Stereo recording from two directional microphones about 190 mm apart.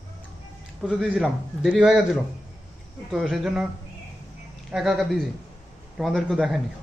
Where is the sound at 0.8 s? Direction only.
5° right (ahead or behind).